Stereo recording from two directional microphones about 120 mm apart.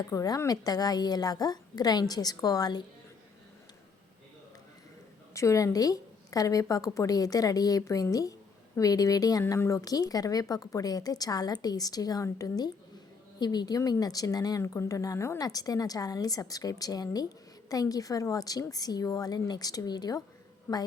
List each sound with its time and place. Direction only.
0.0 s speech: 30° left (ahead or behind)
5.3 s a woman's voice: 25° left (ahead or behind)